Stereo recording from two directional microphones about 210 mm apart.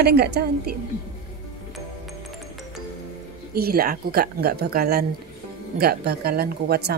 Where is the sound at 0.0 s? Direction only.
50° right (ahead or behind).